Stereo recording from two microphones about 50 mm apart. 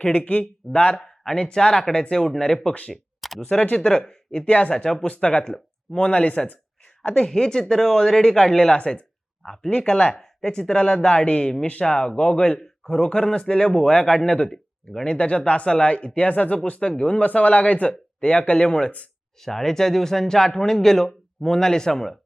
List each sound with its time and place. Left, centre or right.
0.0 s speech: left; by 2.7 s centre
2.7 s speech: left
3.2 s a sound: centre
3.8 s speech: centre
4.4 s speech: left
4.7 s speech: centre
5.0 s speech: left
7.0 s speech: centre
8.7 s speech: left
19.4 s speech: centre